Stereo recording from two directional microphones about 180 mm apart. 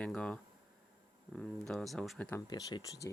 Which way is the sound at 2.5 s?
20° left (ahead or behind).